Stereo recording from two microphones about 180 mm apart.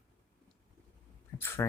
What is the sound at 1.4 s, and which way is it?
Speech, 15° left (ahead or behind).